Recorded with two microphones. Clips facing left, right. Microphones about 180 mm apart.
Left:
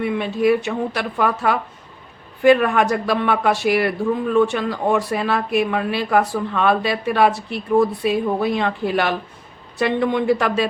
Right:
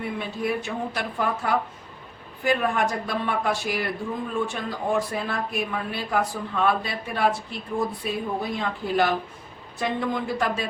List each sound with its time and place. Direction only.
0.0 s speech: 75° left (ahead or behind)